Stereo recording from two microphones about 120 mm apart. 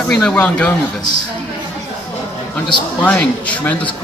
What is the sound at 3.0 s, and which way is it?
Speech, 10° left (ahead or behind).